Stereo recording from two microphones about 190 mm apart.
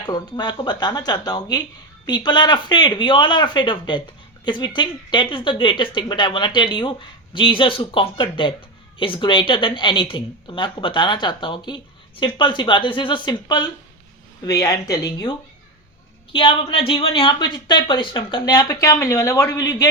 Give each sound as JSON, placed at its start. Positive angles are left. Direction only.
{"t": 0.0, "sound": "speech", "side_deg": 20}